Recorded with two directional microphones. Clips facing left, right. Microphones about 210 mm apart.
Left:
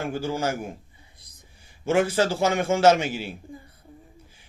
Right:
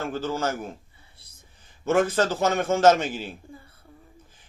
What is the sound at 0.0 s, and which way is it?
A man's voice, 10° left (ahead or behind).